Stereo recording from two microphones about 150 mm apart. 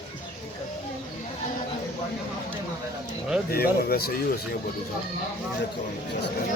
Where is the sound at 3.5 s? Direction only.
90° left.